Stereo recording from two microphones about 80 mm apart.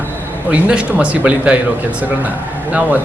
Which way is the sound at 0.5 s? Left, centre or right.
Centre.